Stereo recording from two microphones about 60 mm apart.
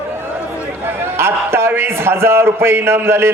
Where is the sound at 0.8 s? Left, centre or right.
Right.